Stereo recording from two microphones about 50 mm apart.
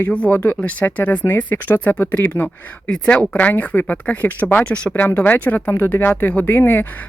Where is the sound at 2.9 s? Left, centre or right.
Left.